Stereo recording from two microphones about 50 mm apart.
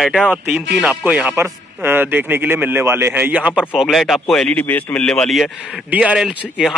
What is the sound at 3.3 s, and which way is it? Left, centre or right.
Speech, right.